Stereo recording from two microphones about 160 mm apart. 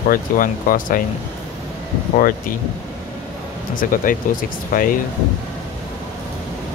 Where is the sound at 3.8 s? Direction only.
60° left (ahead or behind).